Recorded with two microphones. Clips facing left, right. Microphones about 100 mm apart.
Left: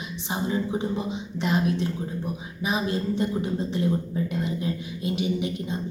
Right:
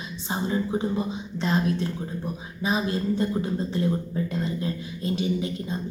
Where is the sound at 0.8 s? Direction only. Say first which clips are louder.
Right 1 dB; 20° left (ahead or behind).